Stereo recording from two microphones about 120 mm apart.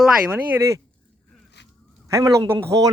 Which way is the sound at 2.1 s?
25° right (ahead or behind).